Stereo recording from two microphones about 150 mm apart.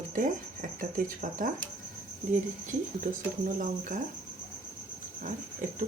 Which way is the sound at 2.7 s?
60° right (ahead or behind).